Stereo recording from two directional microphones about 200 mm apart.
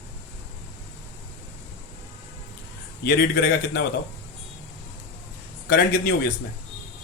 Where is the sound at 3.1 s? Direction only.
50° left (ahead or behind).